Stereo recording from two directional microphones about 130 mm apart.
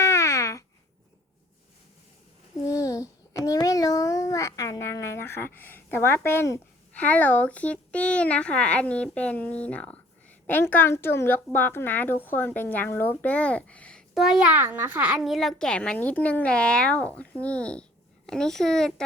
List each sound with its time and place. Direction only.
0.0 s a sound: 20° left (ahead or behind)
2.6 s babbling: 25° left (ahead or behind)
11.5 s speech: 15° left (ahead or behind)
14.1 s a child's voice: 5° right (ahead or behind)